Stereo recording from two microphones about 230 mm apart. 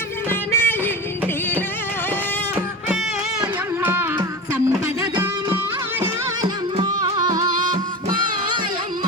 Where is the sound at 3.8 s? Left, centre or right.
Centre.